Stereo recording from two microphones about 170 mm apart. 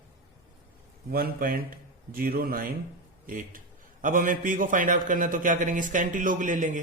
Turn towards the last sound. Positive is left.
turn(degrees=-50)  # may be behind; listen again after turning